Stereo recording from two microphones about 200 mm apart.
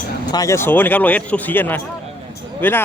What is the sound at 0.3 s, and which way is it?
Speech, 15° left (ahead or behind).